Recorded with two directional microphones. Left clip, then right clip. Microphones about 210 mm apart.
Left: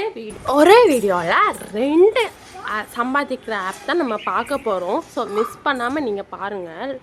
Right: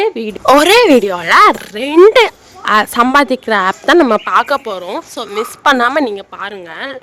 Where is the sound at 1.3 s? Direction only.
55° right (ahead or behind).